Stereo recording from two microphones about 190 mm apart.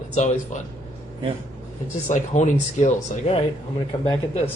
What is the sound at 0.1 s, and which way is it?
Speech, 40° left (ahead or behind).